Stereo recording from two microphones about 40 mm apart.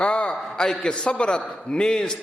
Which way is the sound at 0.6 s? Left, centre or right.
Centre.